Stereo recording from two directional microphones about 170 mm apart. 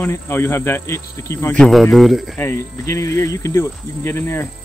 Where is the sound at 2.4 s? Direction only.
15° left (ahead or behind).